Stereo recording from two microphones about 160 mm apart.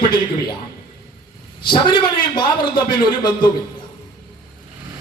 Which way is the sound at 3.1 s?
30° left (ahead or behind).